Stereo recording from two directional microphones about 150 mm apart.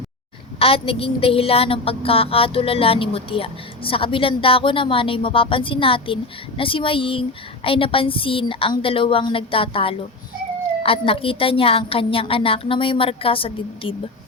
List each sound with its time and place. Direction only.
0.6 s a woman's voice: 40° left (ahead or behind)